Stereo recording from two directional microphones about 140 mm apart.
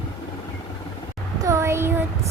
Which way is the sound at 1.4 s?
20° right (ahead or behind).